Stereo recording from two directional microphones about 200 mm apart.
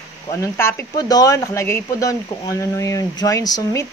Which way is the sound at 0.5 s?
10° left (ahead or behind).